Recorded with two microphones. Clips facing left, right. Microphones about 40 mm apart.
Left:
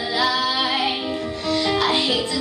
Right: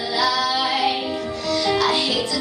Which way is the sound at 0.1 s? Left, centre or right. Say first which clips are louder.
Right 1 dB; left.